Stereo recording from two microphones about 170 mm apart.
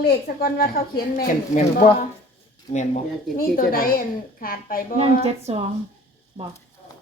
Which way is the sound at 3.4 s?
55° left (ahead or behind).